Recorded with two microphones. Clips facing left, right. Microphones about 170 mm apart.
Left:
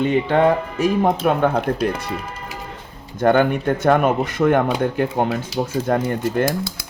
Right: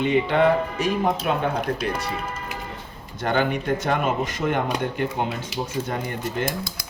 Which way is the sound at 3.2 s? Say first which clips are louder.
Left 7 dB; 50° left (ahead or behind).